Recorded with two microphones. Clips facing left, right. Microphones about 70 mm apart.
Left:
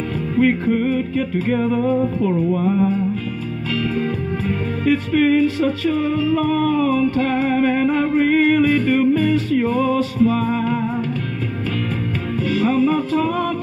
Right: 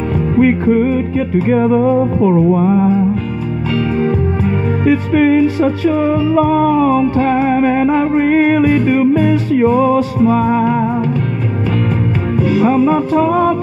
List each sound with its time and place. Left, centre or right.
0.4 s music: right
3.9 s music: right
12.4 s music: right